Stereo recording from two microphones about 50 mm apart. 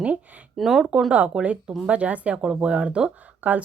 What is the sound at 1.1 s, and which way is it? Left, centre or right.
Speech, right.